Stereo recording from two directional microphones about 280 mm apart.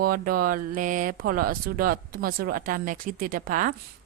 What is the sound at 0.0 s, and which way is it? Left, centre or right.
Speech, right.